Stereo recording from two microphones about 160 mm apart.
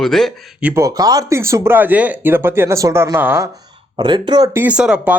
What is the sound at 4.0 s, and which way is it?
Speech, 30° right (ahead or behind).